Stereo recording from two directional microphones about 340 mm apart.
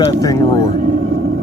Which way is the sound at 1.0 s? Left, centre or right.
Right.